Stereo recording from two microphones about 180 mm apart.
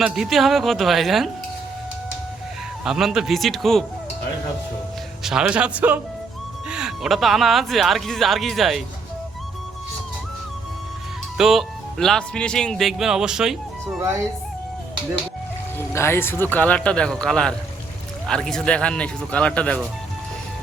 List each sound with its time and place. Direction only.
0.0 s speech: centre (ahead or behind)
2.8 s speech: 5° right (ahead or behind)
5.2 s speech: 5° right (ahead or behind)
11.3 s speech: centre (ahead or behind)
16.0 s speech: 15° left (ahead or behind)